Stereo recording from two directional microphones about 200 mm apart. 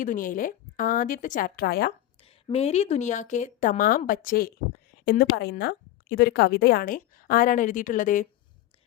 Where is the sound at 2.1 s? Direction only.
30° left (ahead or behind).